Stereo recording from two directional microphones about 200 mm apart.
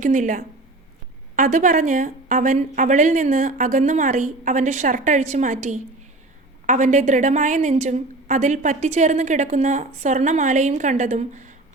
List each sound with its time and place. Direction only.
0.0 s a woman's voice: 40° right (ahead or behind)